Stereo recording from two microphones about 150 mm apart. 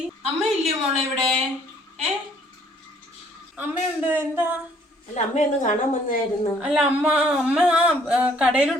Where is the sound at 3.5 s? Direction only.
15° right (ahead or behind).